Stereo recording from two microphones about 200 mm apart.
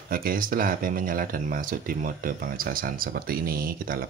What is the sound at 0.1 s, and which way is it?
Speech, 45° right (ahead or behind).